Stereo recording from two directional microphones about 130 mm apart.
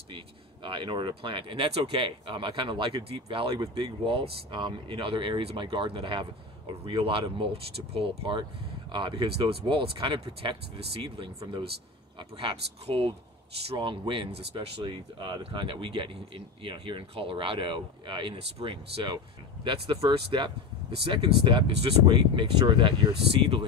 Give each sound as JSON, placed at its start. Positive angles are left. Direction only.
{"t": 0.7, "sound": "speech", "side_deg": -40}